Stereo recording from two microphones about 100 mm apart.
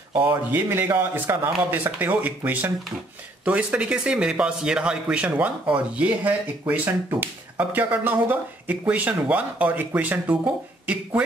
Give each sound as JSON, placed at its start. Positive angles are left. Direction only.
{"t": 0.1, "sound": "speech", "side_deg": -20}